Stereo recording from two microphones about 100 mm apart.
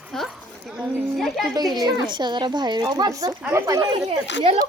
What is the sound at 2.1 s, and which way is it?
Speech, 50° right (ahead or behind).